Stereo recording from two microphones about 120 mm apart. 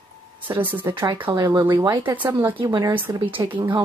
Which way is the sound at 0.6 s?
15° right (ahead or behind).